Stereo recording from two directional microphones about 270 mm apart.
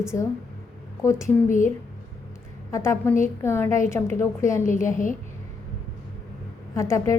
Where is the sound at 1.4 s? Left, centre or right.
Left.